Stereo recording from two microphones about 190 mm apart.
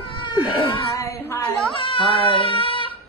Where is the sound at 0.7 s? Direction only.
15° left (ahead or behind).